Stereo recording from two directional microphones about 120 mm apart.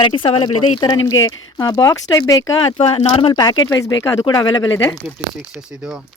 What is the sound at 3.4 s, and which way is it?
Speech, 35° left (ahead or behind).